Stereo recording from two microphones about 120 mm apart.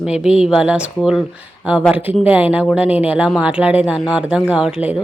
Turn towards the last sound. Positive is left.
turn(degrees=-5)  # may be behind; listen again after turning